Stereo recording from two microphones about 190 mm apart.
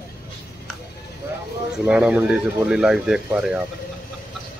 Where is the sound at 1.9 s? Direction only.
5° right (ahead or behind).